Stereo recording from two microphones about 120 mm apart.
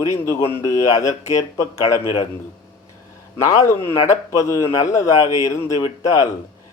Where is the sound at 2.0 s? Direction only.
50° left (ahead or behind).